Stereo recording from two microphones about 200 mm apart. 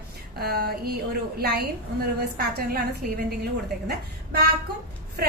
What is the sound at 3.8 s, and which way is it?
Speech, 50° right (ahead or behind).